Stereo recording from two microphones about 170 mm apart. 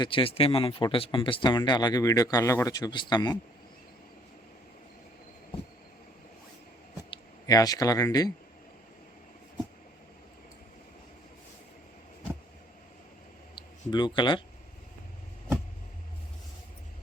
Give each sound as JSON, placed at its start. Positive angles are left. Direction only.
{"t": 0.0, "sound": "speech", "side_deg": 30}
{"t": 7.1, "sound": "speech", "side_deg": 20}
{"t": 13.6, "sound": "speech", "side_deg": 25}